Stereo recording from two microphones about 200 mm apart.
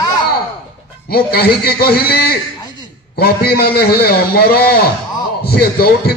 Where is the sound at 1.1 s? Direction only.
50° left (ahead or behind).